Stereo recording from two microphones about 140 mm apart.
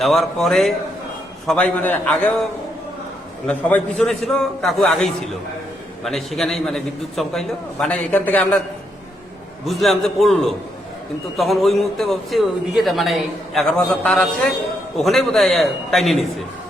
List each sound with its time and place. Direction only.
0.0 s a man's voice: centre (ahead or behind)
3.4 s a man's voice: 5° left (ahead or behind)
9.6 s a man's voice: centre (ahead or behind)